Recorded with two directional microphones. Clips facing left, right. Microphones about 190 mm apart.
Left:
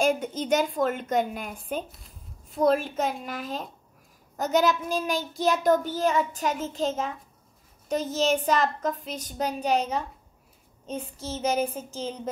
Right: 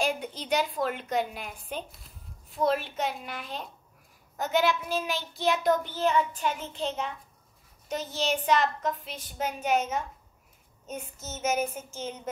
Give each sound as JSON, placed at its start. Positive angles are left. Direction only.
{"t": 0.3, "sound": "a child's voice", "side_deg": 45}
{"t": 1.9, "sound": "a sound", "side_deg": 0}
{"t": 2.6, "sound": "a child's voice", "side_deg": 45}